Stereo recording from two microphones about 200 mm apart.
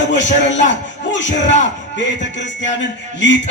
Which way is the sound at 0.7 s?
65° left (ahead or behind).